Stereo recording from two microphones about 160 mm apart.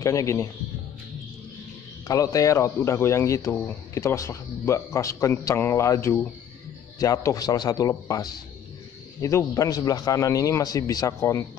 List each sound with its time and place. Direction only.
0.0 s speech: 20° left (ahead or behind)
2.0 s speech: 20° left (ahead or behind)